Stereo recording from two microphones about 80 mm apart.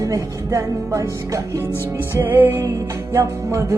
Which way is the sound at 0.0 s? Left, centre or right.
Right.